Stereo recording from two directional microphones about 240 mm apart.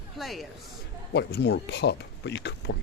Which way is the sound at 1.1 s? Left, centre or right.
Left.